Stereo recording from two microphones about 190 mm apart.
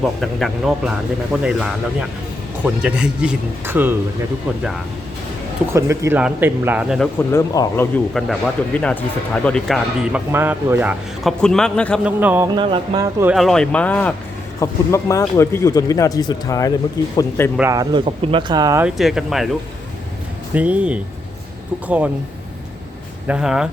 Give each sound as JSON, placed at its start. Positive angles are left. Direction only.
{"t": 0.2, "sound": "speech", "side_deg": 0}
{"t": 5.7, "sound": "speech", "side_deg": -15}
{"t": 7.3, "sound": "speech", "side_deg": 15}
{"t": 7.9, "sound": "speech", "side_deg": 5}
{"t": 12.0, "sound": "speech", "side_deg": -10}
{"t": 12.5, "sound": "speech", "side_deg": -25}
{"t": 13.3, "sound": "speech", "side_deg": 0}
{"t": 17.6, "sound": "speech", "side_deg": -20}
{"t": 18.8, "sound": "speech", "side_deg": -5}
{"t": 20.5, "sound": "speech", "side_deg": -5}
{"t": 23.2, "sound": "speech", "side_deg": -5}